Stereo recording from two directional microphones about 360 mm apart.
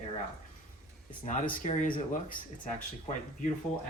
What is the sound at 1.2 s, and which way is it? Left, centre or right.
Speech, centre.